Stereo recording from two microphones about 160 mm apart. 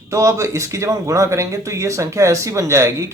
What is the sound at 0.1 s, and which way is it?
A man's voice, 20° right (ahead or behind).